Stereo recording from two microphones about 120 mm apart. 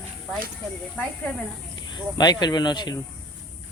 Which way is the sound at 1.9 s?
35° left (ahead or behind).